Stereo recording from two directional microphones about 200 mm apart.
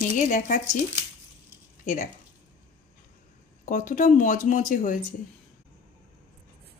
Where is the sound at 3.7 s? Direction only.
40° left (ahead or behind).